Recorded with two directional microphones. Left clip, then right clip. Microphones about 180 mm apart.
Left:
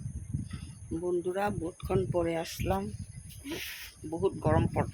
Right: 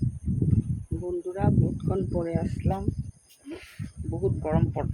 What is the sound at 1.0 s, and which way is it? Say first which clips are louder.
Speech: right 1 dB; 5° right (ahead or behind).